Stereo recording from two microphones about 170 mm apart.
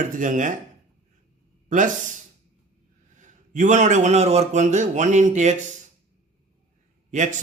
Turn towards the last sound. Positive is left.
turn(degrees=-45)  # may be behind; listen again after turning